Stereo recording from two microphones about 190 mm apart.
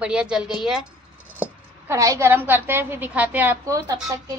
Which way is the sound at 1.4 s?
15° right (ahead or behind).